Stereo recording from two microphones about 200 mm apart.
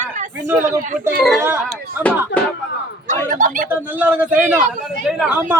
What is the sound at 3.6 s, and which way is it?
A man's voice, 10° right (ahead or behind).